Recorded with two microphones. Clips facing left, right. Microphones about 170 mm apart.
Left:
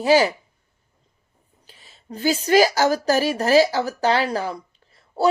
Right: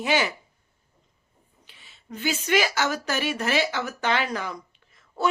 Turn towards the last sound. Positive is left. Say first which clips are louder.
# left 6 dB
turn(degrees=35)  # may be behind; listen again after turning